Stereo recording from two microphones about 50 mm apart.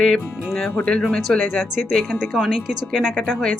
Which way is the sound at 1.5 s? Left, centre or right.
Centre.